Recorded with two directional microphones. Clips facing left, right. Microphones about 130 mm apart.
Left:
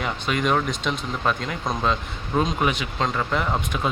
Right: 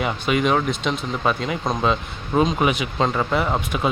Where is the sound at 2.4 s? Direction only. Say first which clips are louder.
Right 4 dB; 5° right (ahead or behind).